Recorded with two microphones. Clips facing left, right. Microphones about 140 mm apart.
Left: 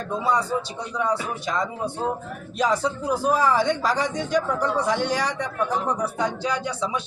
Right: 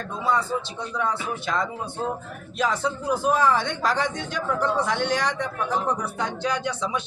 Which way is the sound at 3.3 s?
10° left (ahead or behind).